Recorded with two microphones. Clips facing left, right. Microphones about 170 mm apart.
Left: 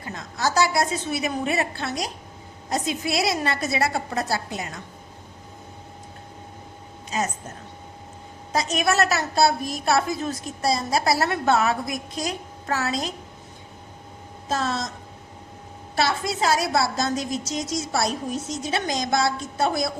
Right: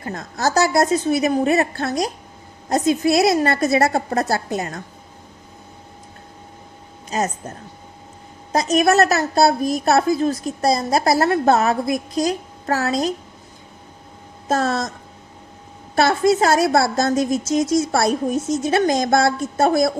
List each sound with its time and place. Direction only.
0.0 s a woman's voice: 50° right (ahead or behind)
7.1 s a woman's voice: 40° right (ahead or behind)
8.5 s a woman's voice: 40° right (ahead or behind)
14.4 s a woman's voice: 50° right (ahead or behind)
16.0 s a woman's voice: 50° right (ahead or behind)